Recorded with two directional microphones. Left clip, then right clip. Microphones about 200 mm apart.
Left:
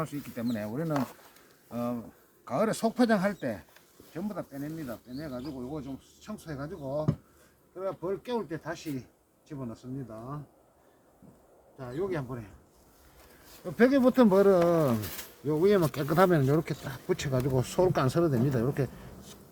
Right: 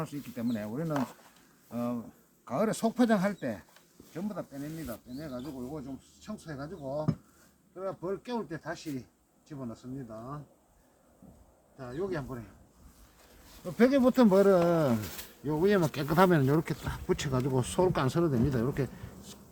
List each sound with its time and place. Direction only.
0.0 s speech: centre (ahead or behind)
11.8 s speech: centre (ahead or behind)
13.7 s speech: 5° right (ahead or behind)